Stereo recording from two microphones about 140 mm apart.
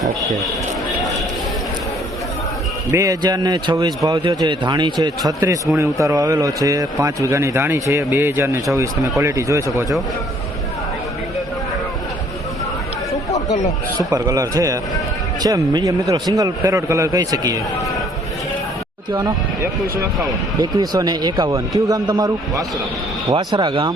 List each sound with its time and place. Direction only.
2.9 s a man's voice: 25° right (ahead or behind)
14.0 s a man's voice: 25° right (ahead or behind)
20.6 s a man's voice: 30° right (ahead or behind)